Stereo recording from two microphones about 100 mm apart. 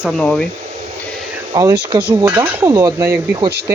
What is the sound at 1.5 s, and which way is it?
Speech, 40° right (ahead or behind).